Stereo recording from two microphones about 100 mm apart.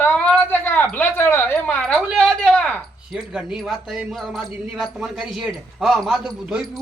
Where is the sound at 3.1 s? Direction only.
5° right (ahead or behind).